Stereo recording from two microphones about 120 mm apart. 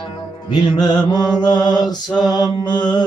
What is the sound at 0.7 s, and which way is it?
Mantra, 35° left (ahead or behind).